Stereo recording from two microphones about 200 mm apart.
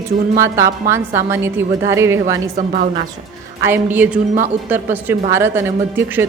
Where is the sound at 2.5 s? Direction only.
45° right (ahead or behind).